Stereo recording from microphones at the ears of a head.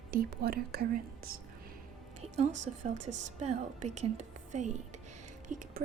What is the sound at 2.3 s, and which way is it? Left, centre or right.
Speech, right.